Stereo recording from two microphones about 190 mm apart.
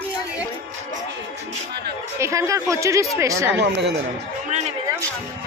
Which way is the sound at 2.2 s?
15° right (ahead or behind).